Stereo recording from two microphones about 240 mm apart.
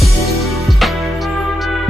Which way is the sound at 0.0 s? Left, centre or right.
Centre.